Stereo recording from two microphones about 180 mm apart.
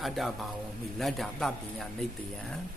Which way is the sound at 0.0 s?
Centre (ahead or behind).